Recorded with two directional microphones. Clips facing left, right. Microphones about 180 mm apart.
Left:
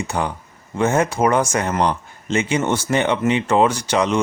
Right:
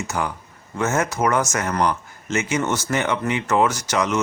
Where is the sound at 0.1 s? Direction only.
25° left (ahead or behind).